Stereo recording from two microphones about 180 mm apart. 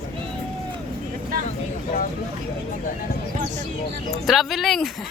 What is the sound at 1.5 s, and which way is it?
Speech, 40° left (ahead or behind).